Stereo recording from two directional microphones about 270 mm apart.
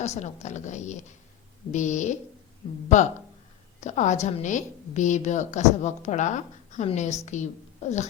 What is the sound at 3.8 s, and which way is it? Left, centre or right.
A woman's voice, left.